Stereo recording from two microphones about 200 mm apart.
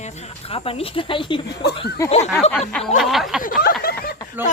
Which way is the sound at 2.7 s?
5° left (ahead or behind).